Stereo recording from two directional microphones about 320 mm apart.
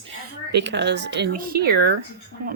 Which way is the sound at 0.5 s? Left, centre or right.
Right.